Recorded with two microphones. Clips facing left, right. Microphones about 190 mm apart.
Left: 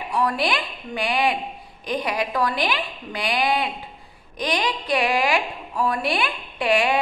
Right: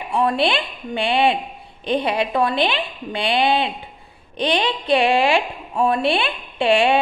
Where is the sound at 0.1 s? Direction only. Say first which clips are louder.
Right 4 dB; 25° right (ahead or behind).